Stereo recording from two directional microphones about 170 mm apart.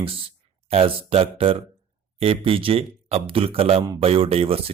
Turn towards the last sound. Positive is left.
turn(degrees=-35)  # may be behind; listen again after turning